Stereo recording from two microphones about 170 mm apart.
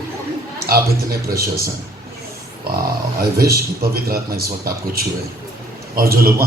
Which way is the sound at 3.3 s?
65° right (ahead or behind).